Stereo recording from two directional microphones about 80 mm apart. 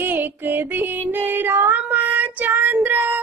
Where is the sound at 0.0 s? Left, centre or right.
Right.